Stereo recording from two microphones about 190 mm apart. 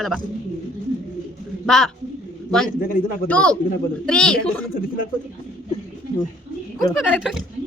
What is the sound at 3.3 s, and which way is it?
A woman's voice, 5° left (ahead or behind).